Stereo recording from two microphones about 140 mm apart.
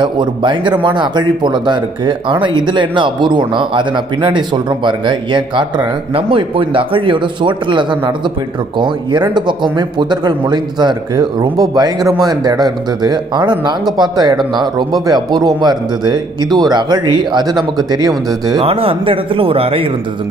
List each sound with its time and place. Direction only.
0.0 s speech: 35° right (ahead or behind)
18.6 s speech: 40° right (ahead or behind)